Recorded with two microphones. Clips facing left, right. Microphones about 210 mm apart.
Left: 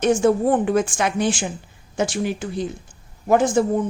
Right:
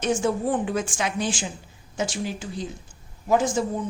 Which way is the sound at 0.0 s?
60° left (ahead or behind).